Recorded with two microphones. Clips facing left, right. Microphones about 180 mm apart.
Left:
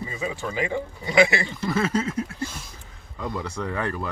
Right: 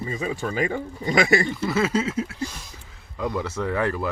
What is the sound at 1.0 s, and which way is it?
Speech, 45° right (ahead or behind).